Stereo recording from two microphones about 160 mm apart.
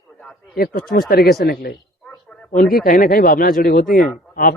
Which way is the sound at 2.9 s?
60° left (ahead or behind).